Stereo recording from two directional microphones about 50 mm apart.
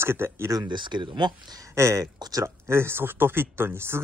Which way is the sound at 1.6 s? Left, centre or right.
Right.